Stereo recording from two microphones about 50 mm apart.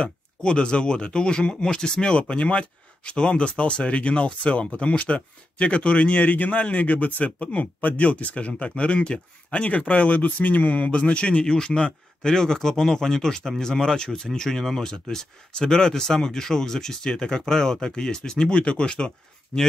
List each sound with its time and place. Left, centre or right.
0.0 s speech: centre
6.1 s speech: left